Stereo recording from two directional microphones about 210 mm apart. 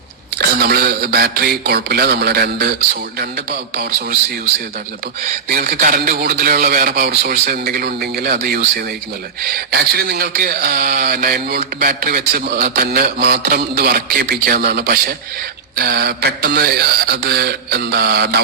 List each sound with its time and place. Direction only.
0.3 s speech: 45° right (ahead or behind)
5.5 s speech: 45° right (ahead or behind)